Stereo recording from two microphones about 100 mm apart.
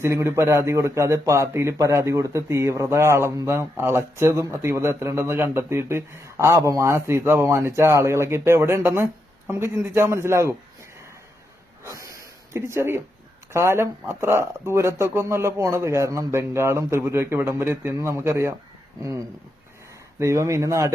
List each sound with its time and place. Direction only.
0.0 s speech: 25° right (ahead or behind)
11.8 s snort: 30° right (ahead or behind)
13.5 s speech: 25° right (ahead or behind)
20.1 s speech: 30° right (ahead or behind)